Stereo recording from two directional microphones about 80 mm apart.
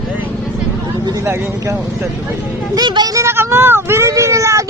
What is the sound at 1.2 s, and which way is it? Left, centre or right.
Speech, right.